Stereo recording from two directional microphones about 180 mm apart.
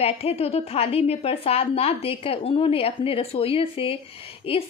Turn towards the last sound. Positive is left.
turn(degrees=30)  # may be behind; listen again after turning